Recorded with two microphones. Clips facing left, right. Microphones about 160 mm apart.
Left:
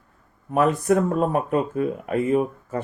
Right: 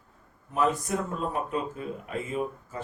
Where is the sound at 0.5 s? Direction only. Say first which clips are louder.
Left 8 dB; 65° left (ahead or behind).